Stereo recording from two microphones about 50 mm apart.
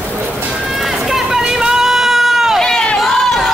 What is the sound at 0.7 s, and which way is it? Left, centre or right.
Music, centre.